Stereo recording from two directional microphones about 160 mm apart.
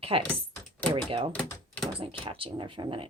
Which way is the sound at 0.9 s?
35° right (ahead or behind).